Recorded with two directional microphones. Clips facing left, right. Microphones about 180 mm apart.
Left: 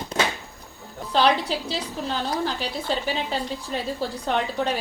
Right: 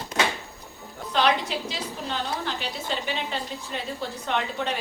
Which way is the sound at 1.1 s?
35° left (ahead or behind).